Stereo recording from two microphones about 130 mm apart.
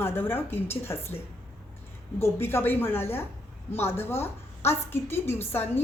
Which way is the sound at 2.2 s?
20° left (ahead or behind).